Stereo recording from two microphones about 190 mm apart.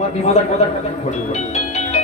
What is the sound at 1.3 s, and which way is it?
Music, 35° left (ahead or behind).